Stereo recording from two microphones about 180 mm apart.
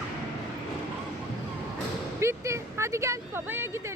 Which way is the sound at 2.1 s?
15° right (ahead or behind).